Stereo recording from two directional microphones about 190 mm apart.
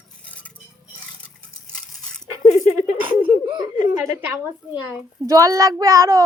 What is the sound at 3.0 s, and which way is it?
Giggle, 25° right (ahead or behind).